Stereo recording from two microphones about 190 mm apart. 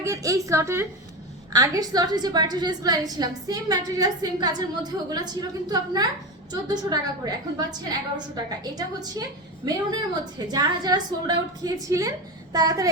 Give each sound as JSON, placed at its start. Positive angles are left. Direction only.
{"t": 0.0, "sound": "a woman's voice", "side_deg": -15}
{"t": 9.6, "sound": "a woman's voice", "side_deg": -20}